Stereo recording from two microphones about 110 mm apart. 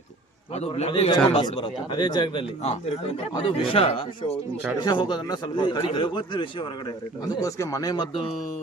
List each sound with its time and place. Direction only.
0.8 s a man's voice: 70° left (ahead or behind)
1.4 s a man's voice: 45° left (ahead or behind)
4.8 s a man's voice: 40° left (ahead or behind)
7.4 s speech: 30° left (ahead or behind)